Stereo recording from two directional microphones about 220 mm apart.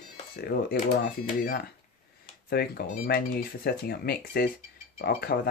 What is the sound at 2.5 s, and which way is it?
Speech, 45° left (ahead or behind).